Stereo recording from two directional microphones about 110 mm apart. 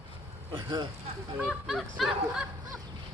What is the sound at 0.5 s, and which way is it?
Speech, 45° right (ahead or behind).